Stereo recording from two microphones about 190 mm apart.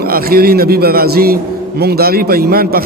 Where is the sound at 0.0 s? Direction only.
50° right (ahead or behind).